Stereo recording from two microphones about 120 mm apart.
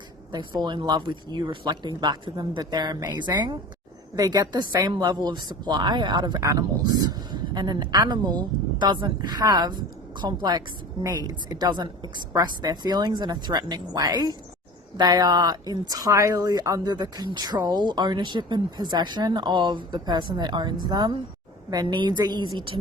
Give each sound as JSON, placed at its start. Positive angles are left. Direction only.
{"t": 0.3, "sound": "a woman's voice", "side_deg": -35}